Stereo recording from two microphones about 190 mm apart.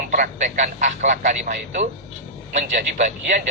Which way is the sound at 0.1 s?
40° right (ahead or behind).